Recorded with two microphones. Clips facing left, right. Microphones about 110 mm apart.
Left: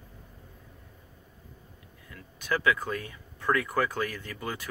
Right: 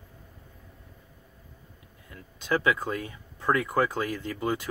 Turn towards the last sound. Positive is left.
turn(degrees=-20)  # may be behind; listen again after turning